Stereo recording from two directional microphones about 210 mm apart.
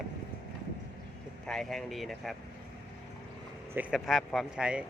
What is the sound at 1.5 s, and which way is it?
Speech, centre (ahead or behind).